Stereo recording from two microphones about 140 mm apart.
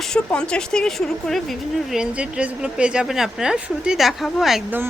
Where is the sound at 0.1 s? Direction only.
5° left (ahead or behind).